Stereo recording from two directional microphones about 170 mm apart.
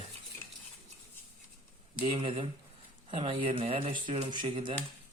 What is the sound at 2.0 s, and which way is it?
Speech, 35° right (ahead or behind).